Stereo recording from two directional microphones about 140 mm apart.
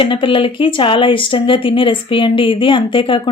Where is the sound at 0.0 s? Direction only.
35° left (ahead or behind).